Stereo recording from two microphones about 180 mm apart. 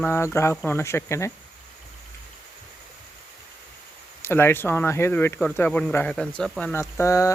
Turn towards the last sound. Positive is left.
turn(degrees=15)  # may be behind; listen again after turning